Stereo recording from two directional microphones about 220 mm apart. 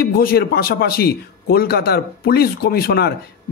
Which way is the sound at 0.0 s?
40° left (ahead or behind).